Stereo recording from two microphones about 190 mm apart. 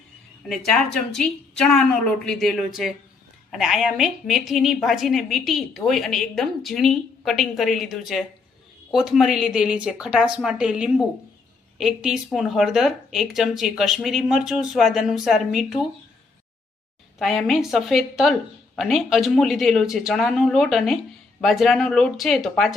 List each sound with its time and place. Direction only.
0.4 s a woman's voice: centre (ahead or behind)
17.2 s a woman's voice: centre (ahead or behind)